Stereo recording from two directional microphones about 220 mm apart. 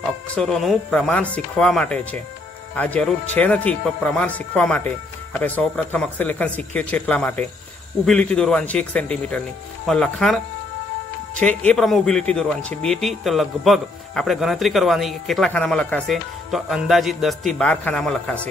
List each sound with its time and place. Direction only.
0.4 s a man's voice: centre (ahead or behind)